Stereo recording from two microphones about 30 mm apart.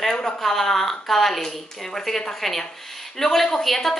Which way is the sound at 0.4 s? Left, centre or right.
Centre.